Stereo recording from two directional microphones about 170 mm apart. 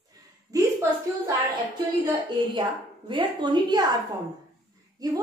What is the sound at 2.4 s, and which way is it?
A woman's voice, 30° right (ahead or behind).